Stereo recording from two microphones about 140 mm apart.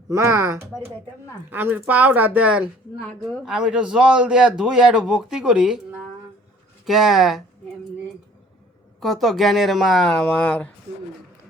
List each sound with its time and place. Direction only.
0.1 s a man's voice: 20° right (ahead or behind); by 5.8 s 5° right (ahead or behind)
6.8 s a man's voice: centre (ahead or behind)
9.0 s a man's voice: centre (ahead or behind)